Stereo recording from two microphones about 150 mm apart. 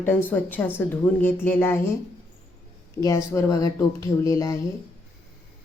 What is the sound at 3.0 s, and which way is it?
Speech, 20° left (ahead or behind).